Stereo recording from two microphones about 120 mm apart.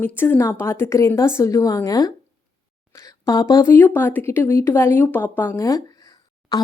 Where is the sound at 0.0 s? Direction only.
15° left (ahead or behind).